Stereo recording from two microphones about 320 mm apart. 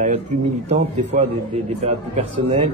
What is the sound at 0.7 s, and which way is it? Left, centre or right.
Speech, centre.